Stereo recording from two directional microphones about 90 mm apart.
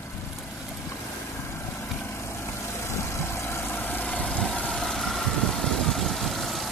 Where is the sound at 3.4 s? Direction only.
25° left (ahead or behind).